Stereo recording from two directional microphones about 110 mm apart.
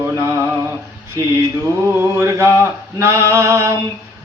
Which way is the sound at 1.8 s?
25° right (ahead or behind).